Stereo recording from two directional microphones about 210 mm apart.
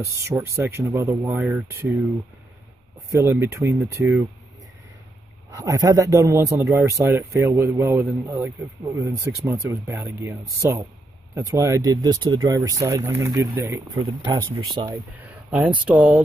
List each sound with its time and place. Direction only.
0.0 s a man's voice: 15° right (ahead or behind)
3.1 s a man's voice: 15° right (ahead or behind)
5.5 s a man's voice: 15° right (ahead or behind)
15.1 s speech: 5° right (ahead or behind)